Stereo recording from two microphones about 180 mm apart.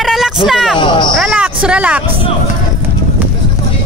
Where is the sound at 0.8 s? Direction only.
25° left (ahead or behind).